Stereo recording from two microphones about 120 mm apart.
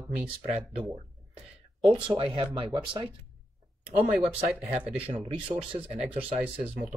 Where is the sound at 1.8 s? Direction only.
50° right (ahead or behind).